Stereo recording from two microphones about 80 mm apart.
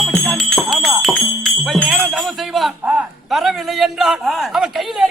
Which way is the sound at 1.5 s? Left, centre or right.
Centre.